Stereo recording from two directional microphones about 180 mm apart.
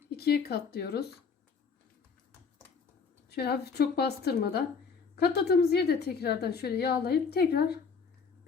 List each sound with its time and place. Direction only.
0.2 s a woman's voice: 60° left (ahead or behind)
3.2 s a woman's voice: 65° left (ahead or behind)